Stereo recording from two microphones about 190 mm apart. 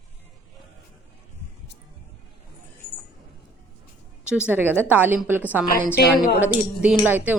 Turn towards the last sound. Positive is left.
turn(degrees=-10)  # may be behind; listen again after turning